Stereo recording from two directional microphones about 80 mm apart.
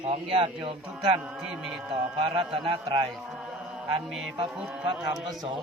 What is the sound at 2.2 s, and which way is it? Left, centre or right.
Speech, right.